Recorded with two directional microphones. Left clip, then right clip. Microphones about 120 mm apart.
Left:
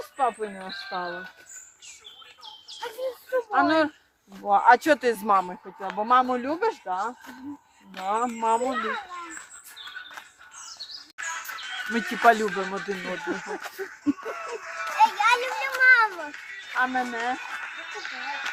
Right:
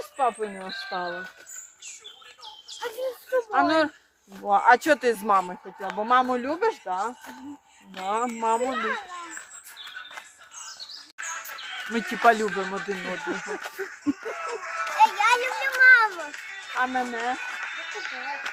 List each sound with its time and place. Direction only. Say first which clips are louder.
0.3 s speech: right 1 dB; 25° right (ahead or behind)
2.4 s bird: right 2 dB; 35° right (ahead or behind)
3.5 s speech: left 1 dB; centre (ahead or behind)
8.7 s a child's voice: right 1 dB; 35° right (ahead or behind)
11.2 s music: left 2 dB; 75° left (ahead or behind); by 11.9 s 50° left (ahead or behind)
12.2 s speech: left 1 dB; 10° left (ahead or behind); by 13.6 s 10° right (ahead or behind)
13.7 s a sound: right 1 dB; 25° right (ahead or behind)
14.0 s a sound: left 2 dB; centre (ahead or behind)
14.4 s music: right 5 dB; 40° right (ahead or behind)
15.2 s children playing: even; 20° right (ahead or behind)
16.2 s music: right 1 dB; 55° right (ahead or behind)
16.6 s music: left 1 dB; 5° left (ahead or behind)
17.3 s a sound: right 2 dB; 20° right (ahead or behind); by 18.5 s 5° right (ahead or behind)